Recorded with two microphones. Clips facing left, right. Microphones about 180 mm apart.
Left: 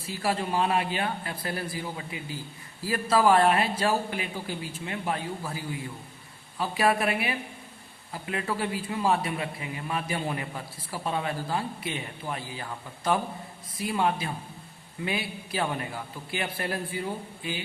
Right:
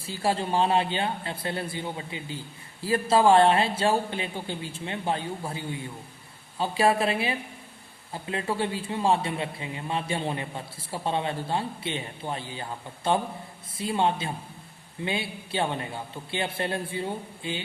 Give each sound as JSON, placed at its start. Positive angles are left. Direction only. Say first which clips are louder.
{"t": 0.0, "sound": "a man's voice", "louder": "right 2 dB", "side_deg": -30}
{"t": 13.7, "sound": "a man's voice", "louder": "right 1 dB", "side_deg": -25}